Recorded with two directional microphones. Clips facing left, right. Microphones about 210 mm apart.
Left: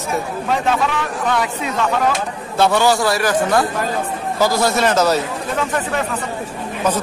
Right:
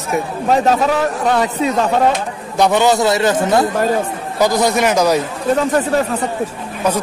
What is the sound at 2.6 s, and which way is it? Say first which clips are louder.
A man's voice: right 2 dB; 20° right (ahead or behind).